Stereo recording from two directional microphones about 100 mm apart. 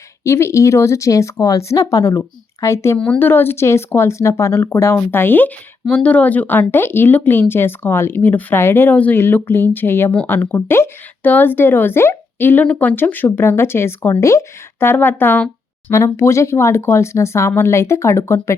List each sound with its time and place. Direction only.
0.3 s speech: 30° left (ahead or behind)